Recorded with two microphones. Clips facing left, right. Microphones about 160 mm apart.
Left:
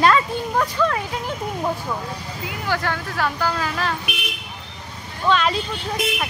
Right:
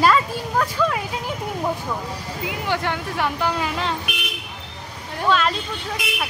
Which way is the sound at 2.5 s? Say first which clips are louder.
Even; 20° right (ahead or behind).